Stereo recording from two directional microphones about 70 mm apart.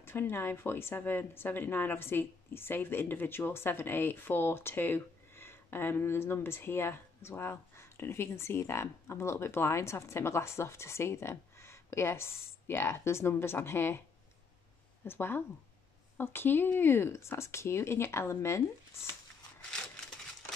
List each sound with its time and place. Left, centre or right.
0.0 s speech: left
15.0 s speech: left